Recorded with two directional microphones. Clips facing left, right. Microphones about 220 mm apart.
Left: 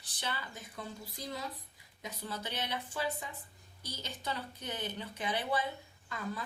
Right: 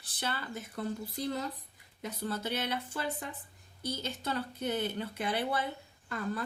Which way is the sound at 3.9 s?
50° right (ahead or behind).